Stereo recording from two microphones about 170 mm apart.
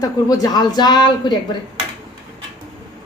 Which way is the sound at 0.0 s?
20° left (ahead or behind).